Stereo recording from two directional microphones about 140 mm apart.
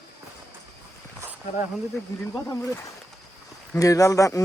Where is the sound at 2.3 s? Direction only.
15° left (ahead or behind).